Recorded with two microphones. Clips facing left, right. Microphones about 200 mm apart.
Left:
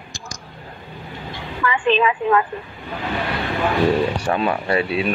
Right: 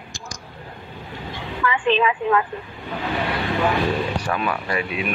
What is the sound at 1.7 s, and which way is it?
Speech, 40° left (ahead or behind).